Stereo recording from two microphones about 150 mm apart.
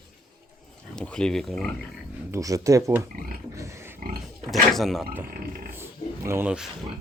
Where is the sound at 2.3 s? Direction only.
20° right (ahead or behind).